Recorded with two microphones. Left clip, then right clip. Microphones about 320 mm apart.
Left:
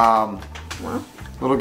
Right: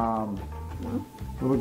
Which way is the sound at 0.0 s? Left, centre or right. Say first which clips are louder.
Left 12 dB; centre.